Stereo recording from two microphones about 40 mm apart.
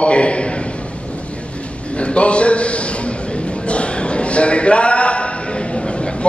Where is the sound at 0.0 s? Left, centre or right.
Left.